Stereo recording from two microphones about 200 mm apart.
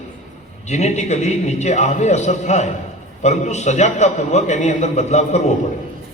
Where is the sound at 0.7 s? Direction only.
35° left (ahead or behind).